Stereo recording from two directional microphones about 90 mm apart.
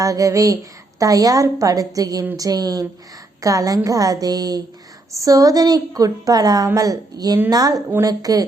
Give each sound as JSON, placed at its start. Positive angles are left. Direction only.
{"t": 0.0, "sound": "a woman's voice", "side_deg": -40}